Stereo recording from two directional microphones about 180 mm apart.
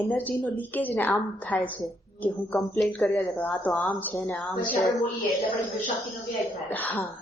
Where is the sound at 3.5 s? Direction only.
Centre (ahead or behind).